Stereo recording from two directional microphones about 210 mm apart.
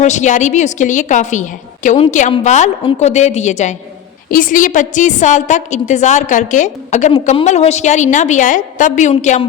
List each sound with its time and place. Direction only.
0.0 s a woman's voice: 35° left (ahead or behind)